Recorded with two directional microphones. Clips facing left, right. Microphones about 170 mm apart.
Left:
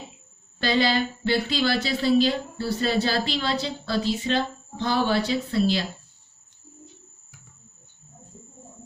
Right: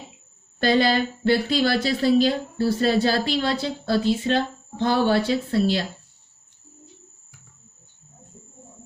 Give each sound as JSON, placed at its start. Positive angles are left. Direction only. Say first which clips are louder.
{"t": 0.6, "sound": "speech", "louder": "right 3 dB", "side_deg": -50}